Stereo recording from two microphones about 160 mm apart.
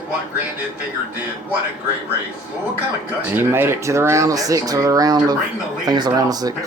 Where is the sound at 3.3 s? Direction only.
15° right (ahead or behind).